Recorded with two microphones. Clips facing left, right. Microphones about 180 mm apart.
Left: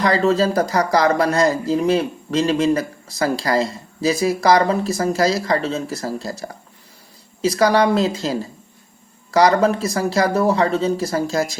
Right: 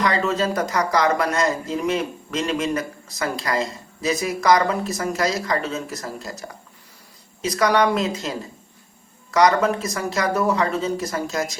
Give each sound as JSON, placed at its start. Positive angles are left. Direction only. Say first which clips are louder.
{"t": 0.0, "sound": "speech", "louder": "left 5 dB", "side_deg": 35}